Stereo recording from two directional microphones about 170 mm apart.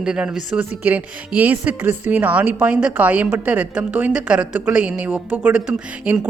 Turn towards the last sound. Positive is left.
turn(degrees=-5)  # may be behind; listen again after turning